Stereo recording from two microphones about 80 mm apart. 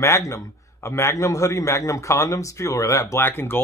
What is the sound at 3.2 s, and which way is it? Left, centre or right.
Speech, left.